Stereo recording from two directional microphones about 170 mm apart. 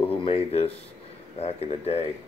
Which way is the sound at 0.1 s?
35° left (ahead or behind).